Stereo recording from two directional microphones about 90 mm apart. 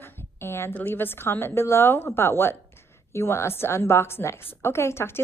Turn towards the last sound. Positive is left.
turn(degrees=30)  # may be behind; listen again after turning